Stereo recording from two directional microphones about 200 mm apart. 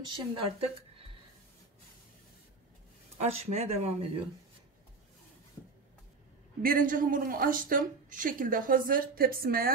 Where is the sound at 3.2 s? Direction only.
30° right (ahead or behind).